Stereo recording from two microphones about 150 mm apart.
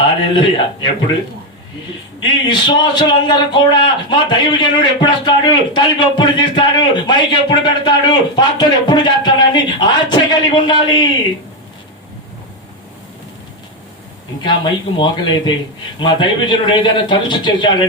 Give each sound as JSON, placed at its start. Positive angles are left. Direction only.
{"t": 0.3, "sound": "a man's voice", "side_deg": 30}
{"t": 2.5, "sound": "a man's voice", "side_deg": 30}
{"t": 14.4, "sound": "a man's voice", "side_deg": 30}